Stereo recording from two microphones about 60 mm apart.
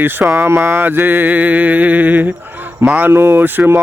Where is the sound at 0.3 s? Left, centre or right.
Right.